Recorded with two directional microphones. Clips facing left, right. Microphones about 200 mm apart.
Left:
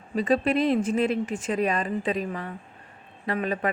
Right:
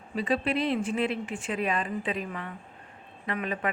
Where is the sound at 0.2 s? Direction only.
45° left (ahead or behind).